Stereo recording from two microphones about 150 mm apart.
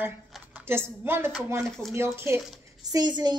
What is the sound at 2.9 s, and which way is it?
Speech, 30° right (ahead or behind).